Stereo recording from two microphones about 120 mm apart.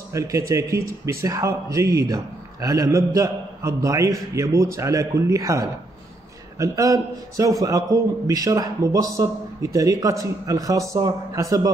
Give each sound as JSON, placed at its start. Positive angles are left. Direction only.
{"t": 0.1, "sound": "a man's voice", "side_deg": -25}